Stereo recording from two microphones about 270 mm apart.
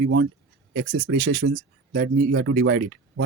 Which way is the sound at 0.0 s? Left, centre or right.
Right.